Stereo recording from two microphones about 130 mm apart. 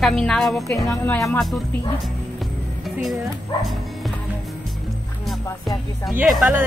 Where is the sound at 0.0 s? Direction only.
5° left (ahead or behind).